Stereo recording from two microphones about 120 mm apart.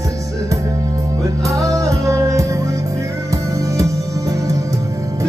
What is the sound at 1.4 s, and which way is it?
Music, 25° right (ahead or behind).